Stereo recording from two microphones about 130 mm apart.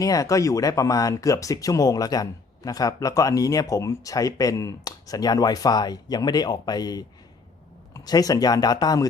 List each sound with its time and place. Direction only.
0.0 s speech: 25° left (ahead or behind)